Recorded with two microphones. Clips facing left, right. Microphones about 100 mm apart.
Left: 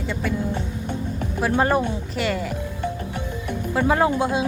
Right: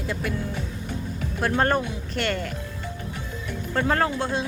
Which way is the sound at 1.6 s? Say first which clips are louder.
Left 3 dB; 10° left (ahead or behind).